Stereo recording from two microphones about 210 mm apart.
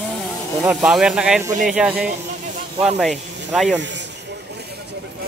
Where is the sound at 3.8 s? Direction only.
60° right (ahead or behind).